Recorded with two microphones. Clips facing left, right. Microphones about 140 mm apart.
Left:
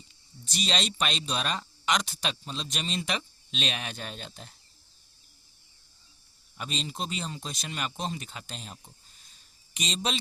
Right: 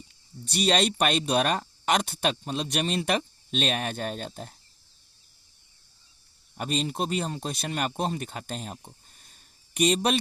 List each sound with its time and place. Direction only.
0.4 s speech: 60° right (ahead or behind)
6.6 s speech: 55° right (ahead or behind)